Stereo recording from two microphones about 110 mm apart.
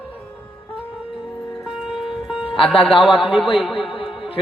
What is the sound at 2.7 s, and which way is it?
Speech, 55° left (ahead or behind).